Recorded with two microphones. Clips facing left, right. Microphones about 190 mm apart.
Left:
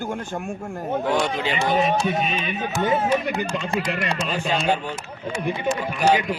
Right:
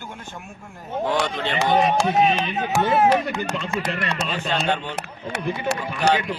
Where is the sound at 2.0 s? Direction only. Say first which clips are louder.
Right 4 dB; 75° right (ahead or behind).